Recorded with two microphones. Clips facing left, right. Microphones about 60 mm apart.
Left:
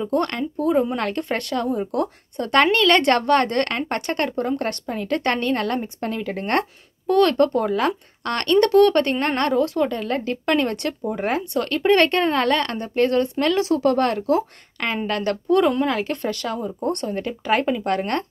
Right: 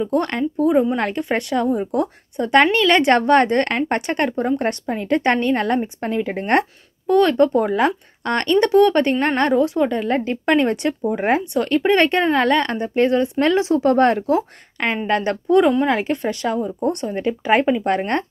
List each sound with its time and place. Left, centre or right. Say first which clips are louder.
0.1 s a woman's voice: right 2 dB; centre
7.1 s a woman's voice: right 2 dB; centre